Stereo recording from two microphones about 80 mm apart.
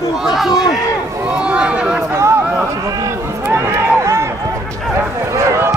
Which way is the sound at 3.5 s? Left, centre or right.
Right.